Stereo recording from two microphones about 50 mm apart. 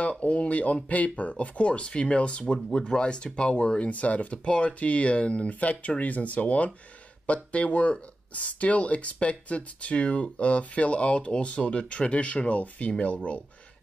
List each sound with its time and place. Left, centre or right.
0.0 s speech: left